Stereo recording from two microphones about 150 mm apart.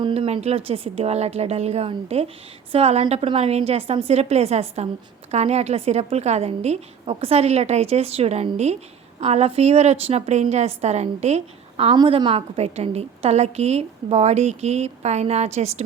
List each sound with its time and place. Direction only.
0.0 s a woman's voice: 40° right (ahead or behind)
11.9 s a woman's voice: 35° right (ahead or behind)